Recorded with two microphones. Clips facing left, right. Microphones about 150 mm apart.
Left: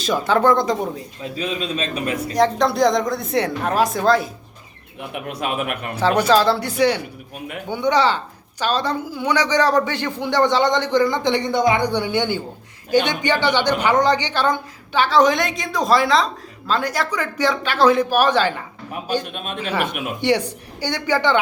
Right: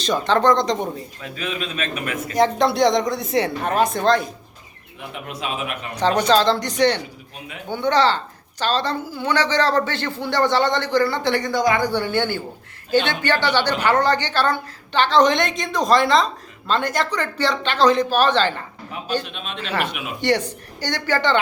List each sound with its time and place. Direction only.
0.0 s speech: 5° left (ahead or behind)
1.2 s a man's voice: 35° left (ahead or behind)
2.3 s speech: centre (ahead or behind)
4.9 s a man's voice: 60° left (ahead or behind)
6.0 s a woman's voice: 10° left (ahead or behind)
19.2 s a man's voice: 50° left (ahead or behind)
19.5 s a woman's voice: 10° left (ahead or behind)
19.9 s a man's voice: 50° left (ahead or behind)
20.2 s a woman's voice: 10° left (ahead or behind)